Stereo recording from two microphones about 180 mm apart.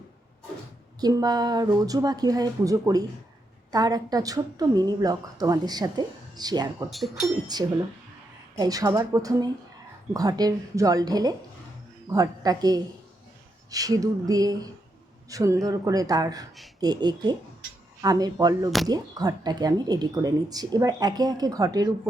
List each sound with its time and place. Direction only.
1.0 s speech: 20° right (ahead or behind)
6.9 s speech: centre (ahead or behind)
7.5 s a man's voice: 20° right (ahead or behind)